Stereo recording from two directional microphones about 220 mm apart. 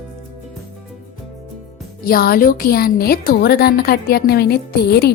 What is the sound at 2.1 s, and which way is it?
A woman's voice, 45° left (ahead or behind).